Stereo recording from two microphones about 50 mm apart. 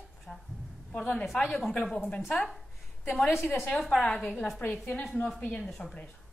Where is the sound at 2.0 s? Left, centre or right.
Left.